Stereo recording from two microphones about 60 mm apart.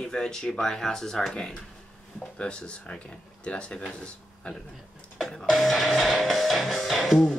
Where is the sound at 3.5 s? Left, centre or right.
Centre.